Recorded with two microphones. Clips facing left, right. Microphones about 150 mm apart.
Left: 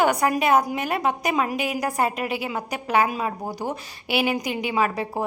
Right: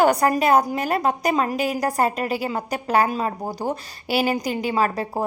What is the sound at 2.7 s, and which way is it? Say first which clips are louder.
Speech: right 1 dB; 40° right (ahead or behind).